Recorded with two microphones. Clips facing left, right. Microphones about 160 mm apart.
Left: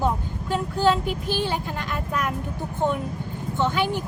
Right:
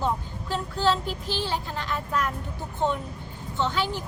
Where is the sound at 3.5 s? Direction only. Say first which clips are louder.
Left 3 dB; 15° left (ahead or behind).